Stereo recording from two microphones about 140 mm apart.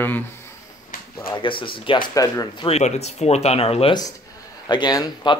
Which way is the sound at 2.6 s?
50° left (ahead or behind).